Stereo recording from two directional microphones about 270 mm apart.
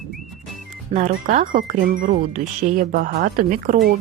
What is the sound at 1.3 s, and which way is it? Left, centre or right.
Speech, right.